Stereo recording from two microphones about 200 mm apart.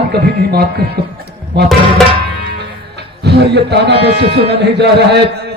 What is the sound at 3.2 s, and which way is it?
A man's voice, 55° right (ahead or behind).